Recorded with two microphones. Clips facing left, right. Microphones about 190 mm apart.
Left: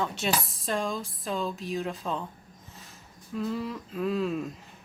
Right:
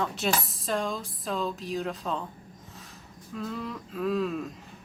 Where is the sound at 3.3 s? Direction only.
Centre (ahead or behind).